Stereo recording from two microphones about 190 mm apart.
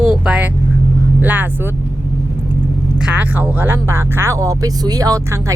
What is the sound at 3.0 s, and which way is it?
Speech, 10° right (ahead or behind).